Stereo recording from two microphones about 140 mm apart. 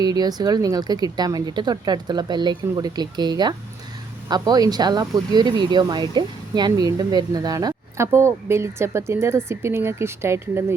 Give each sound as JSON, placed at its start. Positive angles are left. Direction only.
{"t": 0.0, "sound": "speech", "side_deg": -30}